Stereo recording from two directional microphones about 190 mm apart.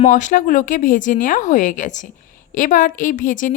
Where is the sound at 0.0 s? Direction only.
40° left (ahead or behind).